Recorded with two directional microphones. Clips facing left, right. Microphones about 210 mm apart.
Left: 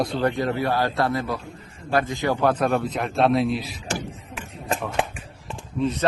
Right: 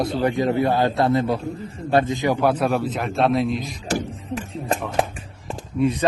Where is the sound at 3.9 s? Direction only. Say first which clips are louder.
Right 9 dB; 40° right (ahead or behind).